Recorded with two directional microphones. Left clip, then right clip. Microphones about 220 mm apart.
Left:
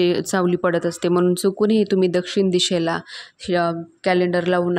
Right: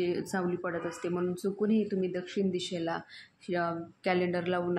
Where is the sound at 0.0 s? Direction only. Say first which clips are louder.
Left 13 dB; 45° left (ahead or behind).